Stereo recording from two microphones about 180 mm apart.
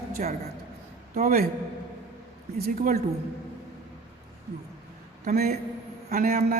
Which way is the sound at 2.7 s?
45° right (ahead or behind).